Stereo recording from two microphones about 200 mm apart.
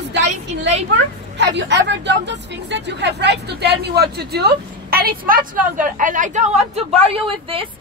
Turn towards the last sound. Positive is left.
turn(degrees=-25)  # may be behind; listen again after turning